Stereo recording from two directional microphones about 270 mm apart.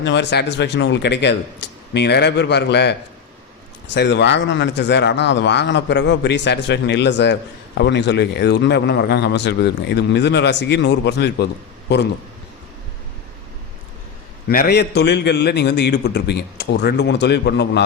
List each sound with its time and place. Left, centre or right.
0.0 s a man's voice: left
14.4 s a man's voice: left